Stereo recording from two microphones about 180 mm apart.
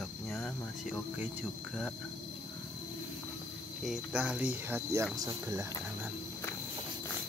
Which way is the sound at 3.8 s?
5° right (ahead or behind).